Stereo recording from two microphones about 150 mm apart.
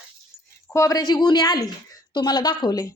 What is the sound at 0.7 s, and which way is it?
A woman's voice, 20° left (ahead or behind).